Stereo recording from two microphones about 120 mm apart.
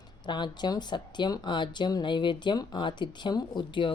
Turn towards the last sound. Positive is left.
turn(degrees=40)  # may be behind; listen again after turning